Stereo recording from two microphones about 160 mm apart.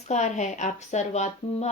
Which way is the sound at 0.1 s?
45° left (ahead or behind).